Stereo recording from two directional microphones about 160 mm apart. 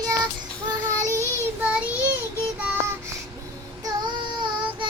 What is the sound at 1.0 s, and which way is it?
Child singing, 15° right (ahead or behind).